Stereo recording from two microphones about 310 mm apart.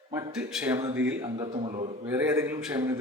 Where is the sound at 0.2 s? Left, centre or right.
Centre.